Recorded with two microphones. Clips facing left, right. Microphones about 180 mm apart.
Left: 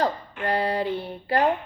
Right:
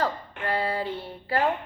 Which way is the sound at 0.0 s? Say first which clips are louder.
Left 3 dB; 20° left (ahead or behind).